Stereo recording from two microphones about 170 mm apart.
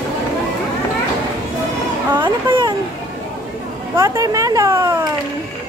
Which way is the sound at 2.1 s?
25° right (ahead or behind).